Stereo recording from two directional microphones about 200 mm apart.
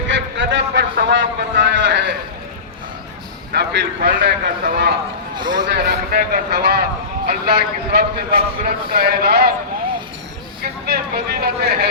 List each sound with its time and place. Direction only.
0.1 s a sound: 65° right (ahead or behind)
3.5 s a man's voice: 55° right (ahead or behind)
5.4 s a man's voice: 20° right (ahead or behind)
5.7 s a man's voice: 50° right (ahead or behind)
10.6 s speech: 50° right (ahead or behind)